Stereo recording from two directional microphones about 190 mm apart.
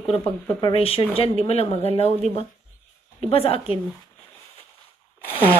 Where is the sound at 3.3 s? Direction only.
30° left (ahead or behind).